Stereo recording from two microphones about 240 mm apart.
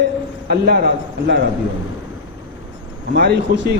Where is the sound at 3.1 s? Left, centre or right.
Right.